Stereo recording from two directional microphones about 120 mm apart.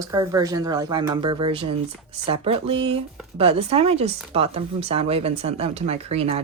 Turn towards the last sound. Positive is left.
turn(degrees=-60)  # may be behind; listen again after turning